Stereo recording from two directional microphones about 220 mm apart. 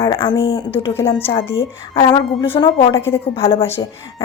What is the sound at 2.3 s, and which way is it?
Speech, 10° left (ahead or behind).